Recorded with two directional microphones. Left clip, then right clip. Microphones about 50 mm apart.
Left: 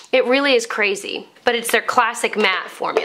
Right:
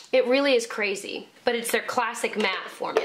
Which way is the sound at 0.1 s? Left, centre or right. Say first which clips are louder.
Left 5 dB; left.